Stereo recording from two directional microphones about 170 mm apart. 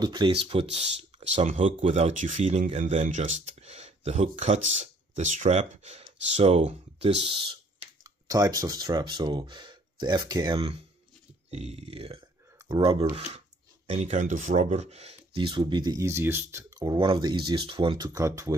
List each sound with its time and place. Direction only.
0.0 s speech: 25° right (ahead or behind)
8.0 s speech: 20° right (ahead or behind)
13.8 s speech: 40° right (ahead or behind); by 16.9 s 15° right (ahead or behind)
16.9 s speech: 30° right (ahead or behind)